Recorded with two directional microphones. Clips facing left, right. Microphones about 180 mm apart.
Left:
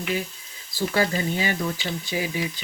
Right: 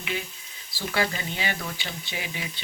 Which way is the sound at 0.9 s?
40° left (ahead or behind).